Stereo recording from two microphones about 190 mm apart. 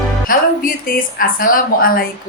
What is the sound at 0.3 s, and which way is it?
A woman's voice, 45° left (ahead or behind).